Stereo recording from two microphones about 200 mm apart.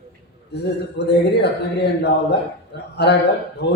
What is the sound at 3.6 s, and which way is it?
Speech, 55° left (ahead or behind).